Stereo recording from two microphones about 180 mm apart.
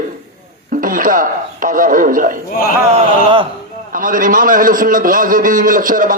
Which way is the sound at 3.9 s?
50° right (ahead or behind).